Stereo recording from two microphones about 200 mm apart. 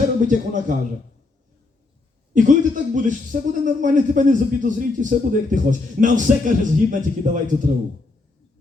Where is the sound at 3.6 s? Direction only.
40° right (ahead or behind).